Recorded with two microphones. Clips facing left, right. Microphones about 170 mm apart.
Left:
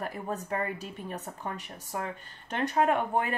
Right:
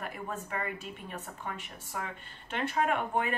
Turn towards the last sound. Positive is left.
turn(degrees=40)  # may be behind; listen again after turning